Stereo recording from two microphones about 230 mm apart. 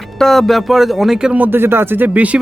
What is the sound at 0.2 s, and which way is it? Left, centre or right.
Speech, centre.